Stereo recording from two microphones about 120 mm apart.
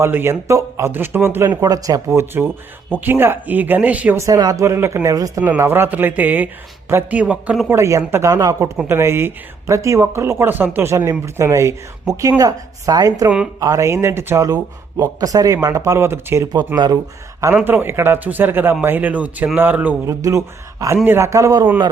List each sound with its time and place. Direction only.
0.0 s speech: 20° right (ahead or behind)
1.6 s speech: 30° right (ahead or behind)
2.0 s speech: 20° right (ahead or behind)
4.2 s speech: 30° right (ahead or behind)
5.4 s speech: 20° right (ahead or behind)
7.7 s speech: 25° right (ahead or behind)
17.7 s speech: 15° right (ahead or behind)
20.1 s speech: 25° right (ahead or behind)